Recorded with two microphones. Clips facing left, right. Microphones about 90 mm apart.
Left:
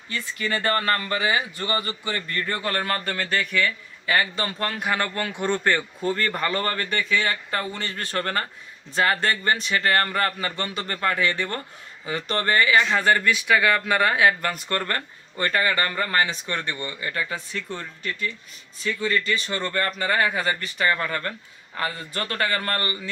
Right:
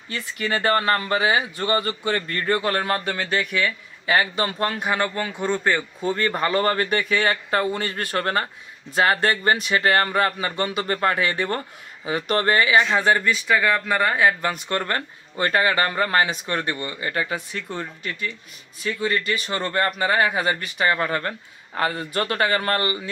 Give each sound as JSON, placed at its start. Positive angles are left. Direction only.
{"t": 0.1, "sound": "speech", "side_deg": -25}
{"t": 2.5, "sound": "speech", "side_deg": -25}
{"t": 4.7, "sound": "speech", "side_deg": -5}
{"t": 6.1, "sound": "speech", "side_deg": -30}
{"t": 10.8, "sound": "speech", "side_deg": -30}
{"t": 12.7, "sound": "speech", "side_deg": -15}
{"t": 13.3, "sound": "speech", "side_deg": 0}
{"t": 14.7, "sound": "speech", "side_deg": -25}
{"t": 18.8, "sound": "speech", "side_deg": -35}
{"t": 19.3, "sound": "speech", "side_deg": -25}
{"t": 20.4, "sound": "speech", "side_deg": -15}
{"t": 20.8, "sound": "speech", "side_deg": -30}